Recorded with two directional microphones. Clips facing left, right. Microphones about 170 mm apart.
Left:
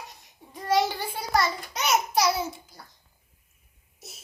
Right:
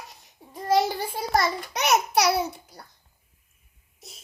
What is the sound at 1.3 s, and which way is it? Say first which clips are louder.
A child's voice: right 1 dB; 60° right (ahead or behind).